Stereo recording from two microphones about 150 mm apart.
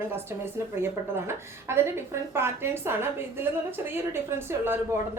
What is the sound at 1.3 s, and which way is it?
A woman's voice, 15° right (ahead or behind).